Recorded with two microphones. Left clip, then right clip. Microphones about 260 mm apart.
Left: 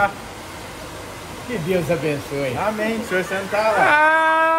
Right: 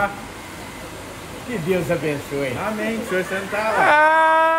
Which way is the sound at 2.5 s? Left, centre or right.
Centre.